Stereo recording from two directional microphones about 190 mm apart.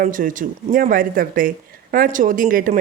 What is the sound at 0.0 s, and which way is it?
Speech, 45° right (ahead or behind).